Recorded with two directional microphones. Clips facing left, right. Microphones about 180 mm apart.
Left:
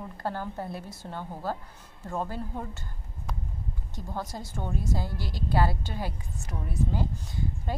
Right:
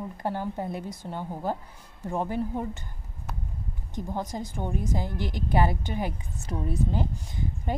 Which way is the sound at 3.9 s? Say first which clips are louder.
Right 5 dB; 15° right (ahead or behind).